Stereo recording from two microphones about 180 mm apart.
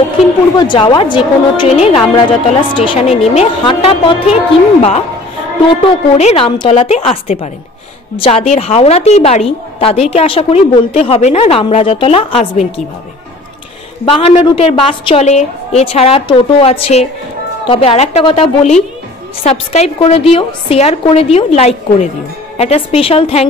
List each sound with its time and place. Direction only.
0.6 s a woman's voice: 25° left (ahead or behind)
5.7 s a woman's voice: 35° left (ahead or behind)
14.0 s a woman's voice: 30° left (ahead or behind)